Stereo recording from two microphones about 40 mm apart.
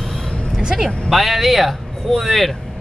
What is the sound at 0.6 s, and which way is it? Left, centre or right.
Speech, centre.